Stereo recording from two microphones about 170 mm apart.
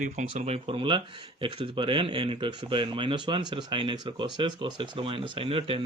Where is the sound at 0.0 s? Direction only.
40° right (ahead or behind).